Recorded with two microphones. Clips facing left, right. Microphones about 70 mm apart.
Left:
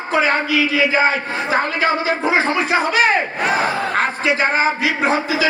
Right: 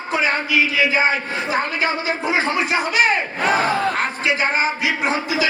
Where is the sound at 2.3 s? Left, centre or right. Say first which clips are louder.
Left 2 dB; left.